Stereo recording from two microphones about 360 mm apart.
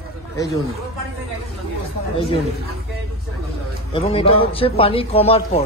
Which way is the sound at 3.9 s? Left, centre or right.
Centre.